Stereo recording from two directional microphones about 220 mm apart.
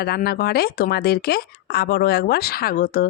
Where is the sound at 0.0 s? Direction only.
45° left (ahead or behind).